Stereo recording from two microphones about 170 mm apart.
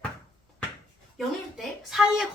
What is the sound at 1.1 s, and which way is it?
A woman's voice, centre (ahead or behind).